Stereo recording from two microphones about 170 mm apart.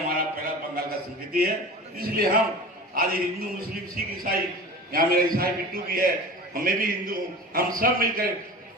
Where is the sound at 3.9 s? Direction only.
60° right (ahead or behind).